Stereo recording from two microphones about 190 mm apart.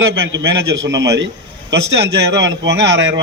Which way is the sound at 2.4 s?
70° right (ahead or behind).